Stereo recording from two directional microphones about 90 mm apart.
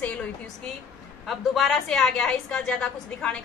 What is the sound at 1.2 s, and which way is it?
A woman's voice, centre (ahead or behind).